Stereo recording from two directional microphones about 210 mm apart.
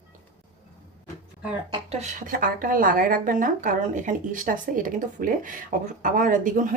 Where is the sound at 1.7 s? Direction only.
30° right (ahead or behind).